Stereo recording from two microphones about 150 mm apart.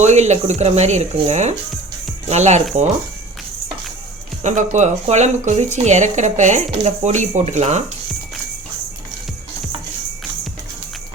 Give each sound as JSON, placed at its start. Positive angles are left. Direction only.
{"t": 0.0, "sound": "speech", "side_deg": -50}
{"t": 4.4, "sound": "speech", "side_deg": -50}